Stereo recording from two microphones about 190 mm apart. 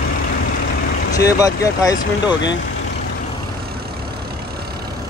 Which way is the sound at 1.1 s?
20° left (ahead or behind).